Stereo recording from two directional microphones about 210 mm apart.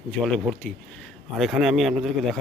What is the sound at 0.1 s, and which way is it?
Speech, centre (ahead or behind).